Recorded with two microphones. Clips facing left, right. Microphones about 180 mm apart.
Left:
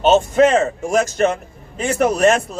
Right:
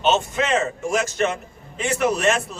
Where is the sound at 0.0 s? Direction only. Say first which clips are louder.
Left 8 dB; 40° left (ahead or behind).